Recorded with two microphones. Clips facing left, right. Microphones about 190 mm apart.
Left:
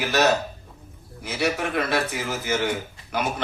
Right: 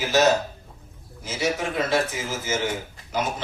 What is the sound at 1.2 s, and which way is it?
Mantra, 60° left (ahead or behind).